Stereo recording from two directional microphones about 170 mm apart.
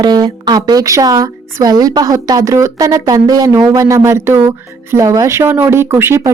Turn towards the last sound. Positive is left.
turn(degrees=-15)  # may be behind; listen again after turning